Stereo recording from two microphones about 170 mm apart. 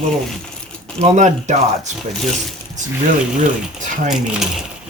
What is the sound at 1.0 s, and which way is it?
Speech, 45° right (ahead or behind).